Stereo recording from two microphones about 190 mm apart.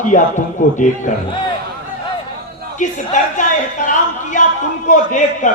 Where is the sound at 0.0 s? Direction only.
40° left (ahead or behind).